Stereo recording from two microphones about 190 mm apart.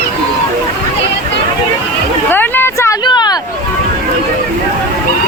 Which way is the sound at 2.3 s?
10° left (ahead or behind).